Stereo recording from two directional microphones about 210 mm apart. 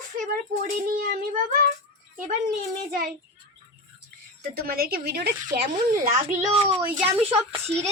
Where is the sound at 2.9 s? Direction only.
45° right (ahead or behind).